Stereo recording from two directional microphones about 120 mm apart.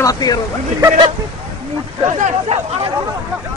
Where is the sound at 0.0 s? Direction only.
30° left (ahead or behind).